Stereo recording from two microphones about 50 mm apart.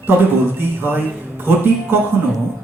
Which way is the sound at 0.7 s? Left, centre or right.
Right.